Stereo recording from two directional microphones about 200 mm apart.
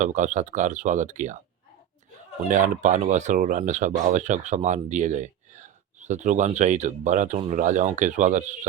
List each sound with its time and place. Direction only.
0.0 s speech: 40° right (ahead or behind)
2.5 s speech: 40° right (ahead or behind)